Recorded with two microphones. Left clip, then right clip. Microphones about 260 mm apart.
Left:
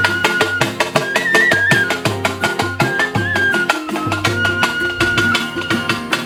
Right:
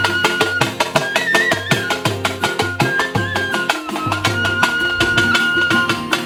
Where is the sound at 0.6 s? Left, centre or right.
Centre.